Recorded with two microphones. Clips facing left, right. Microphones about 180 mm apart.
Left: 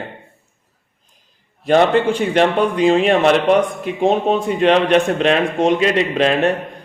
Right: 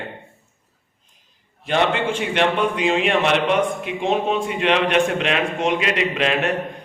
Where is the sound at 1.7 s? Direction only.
40° left (ahead or behind).